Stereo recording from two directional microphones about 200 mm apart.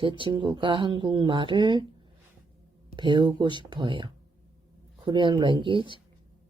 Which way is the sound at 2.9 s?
25° right (ahead or behind).